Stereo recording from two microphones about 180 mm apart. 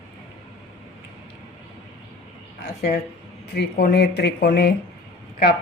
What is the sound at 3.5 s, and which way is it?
Speech, 65° left (ahead or behind).